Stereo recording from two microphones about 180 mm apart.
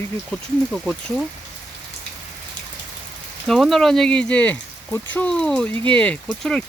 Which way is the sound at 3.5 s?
Centre (ahead or behind).